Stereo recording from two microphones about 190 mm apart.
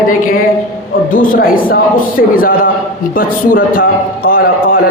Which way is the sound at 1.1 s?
50° left (ahead or behind).